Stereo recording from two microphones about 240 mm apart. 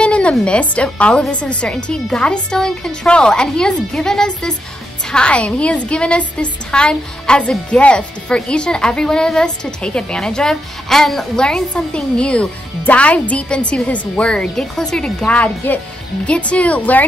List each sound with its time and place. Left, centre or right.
0.0 s a woman's voice: centre